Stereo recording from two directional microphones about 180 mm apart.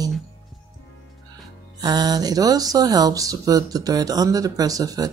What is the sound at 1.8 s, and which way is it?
Speech, 20° right (ahead or behind).